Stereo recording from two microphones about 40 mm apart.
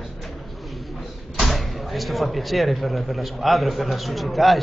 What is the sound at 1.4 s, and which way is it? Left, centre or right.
Speech, centre.